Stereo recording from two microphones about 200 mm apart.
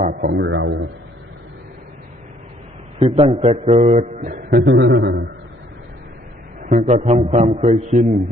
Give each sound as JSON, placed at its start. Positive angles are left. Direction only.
{"t": 0.1, "sound": "a man's voice", "side_deg": -55}
{"t": 3.0, "sound": "a man's voice", "side_deg": -25}
{"t": 4.6, "sound": "a man's voice", "side_deg": -60}
{"t": 6.6, "sound": "a man's voice", "side_deg": -40}